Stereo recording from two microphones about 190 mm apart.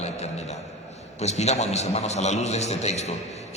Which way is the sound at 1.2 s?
35° left (ahead or behind).